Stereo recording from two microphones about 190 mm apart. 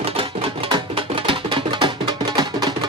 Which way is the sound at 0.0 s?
30° right (ahead or behind).